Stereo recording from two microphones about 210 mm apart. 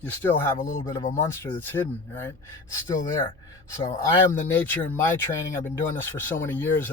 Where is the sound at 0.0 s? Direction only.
10° left (ahead or behind).